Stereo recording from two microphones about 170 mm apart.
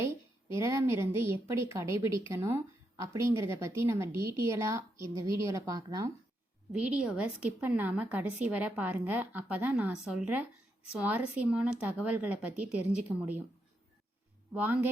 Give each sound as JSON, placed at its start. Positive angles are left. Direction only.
{"t": 0.0, "sound": "a woman's voice", "side_deg": -15}
{"t": 6.8, "sound": "a woman's voice", "side_deg": -5}
{"t": 14.5, "sound": "a woman's voice", "side_deg": -10}